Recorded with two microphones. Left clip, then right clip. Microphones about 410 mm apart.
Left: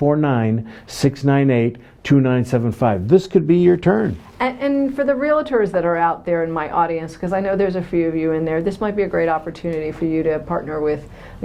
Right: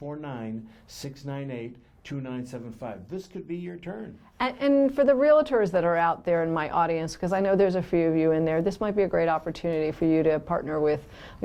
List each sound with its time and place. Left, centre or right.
0.0 s speech: left
4.4 s speech: right